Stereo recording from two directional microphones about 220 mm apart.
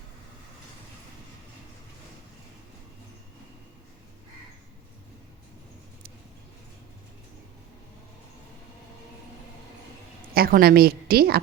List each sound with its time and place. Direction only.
10.3 s a woman's voice: 45° right (ahead or behind)